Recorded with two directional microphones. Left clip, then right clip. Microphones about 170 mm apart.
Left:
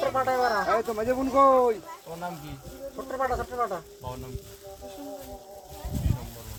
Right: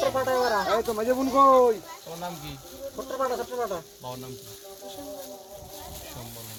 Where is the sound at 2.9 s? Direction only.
35° right (ahead or behind).